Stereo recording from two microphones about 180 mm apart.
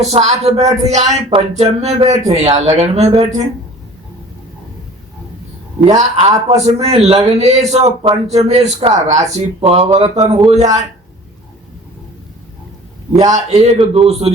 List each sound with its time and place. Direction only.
0.0 s speech: 40° right (ahead or behind)
6.0 s speech: 35° right (ahead or behind)
13.2 s speech: 40° right (ahead or behind)